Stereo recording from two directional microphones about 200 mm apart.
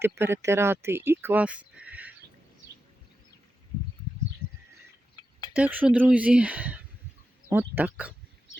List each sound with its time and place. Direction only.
0.0 s speech: 10° right (ahead or behind)
5.2 s a sound: 20° left (ahead or behind)
5.5 s speech: 10° right (ahead or behind)